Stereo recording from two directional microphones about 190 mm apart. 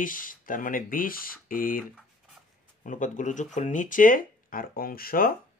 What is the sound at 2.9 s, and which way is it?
Speech, 40° left (ahead or behind).